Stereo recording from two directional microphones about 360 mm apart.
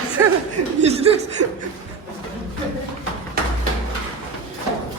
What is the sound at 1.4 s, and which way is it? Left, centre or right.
Speech, right.